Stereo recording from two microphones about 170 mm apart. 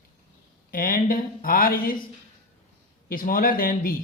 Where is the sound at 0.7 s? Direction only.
55° left (ahead or behind).